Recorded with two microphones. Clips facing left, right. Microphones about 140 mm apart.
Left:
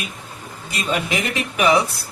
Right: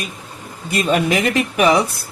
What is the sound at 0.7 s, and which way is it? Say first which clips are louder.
Speech: right 6 dB; 50° right (ahead or behind).